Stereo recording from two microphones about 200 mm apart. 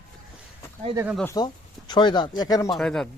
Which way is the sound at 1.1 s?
10° left (ahead or behind).